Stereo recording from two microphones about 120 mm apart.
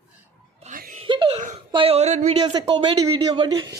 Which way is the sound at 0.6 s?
75° right (ahead or behind).